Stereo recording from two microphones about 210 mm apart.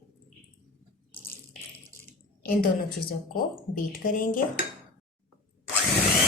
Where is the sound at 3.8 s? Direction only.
40° left (ahead or behind).